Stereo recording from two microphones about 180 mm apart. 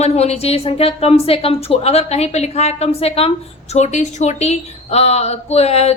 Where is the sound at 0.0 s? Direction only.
35° left (ahead or behind).